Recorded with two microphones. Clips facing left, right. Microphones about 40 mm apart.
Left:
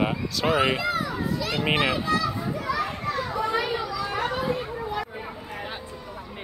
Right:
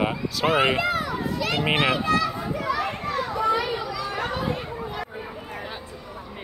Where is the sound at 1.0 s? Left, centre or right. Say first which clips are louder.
Right 1 dB; right.